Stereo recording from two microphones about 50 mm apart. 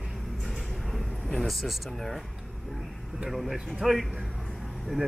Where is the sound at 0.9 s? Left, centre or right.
Centre.